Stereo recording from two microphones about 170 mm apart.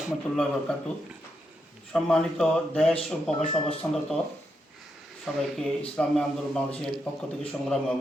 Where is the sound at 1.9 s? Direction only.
5° left (ahead or behind).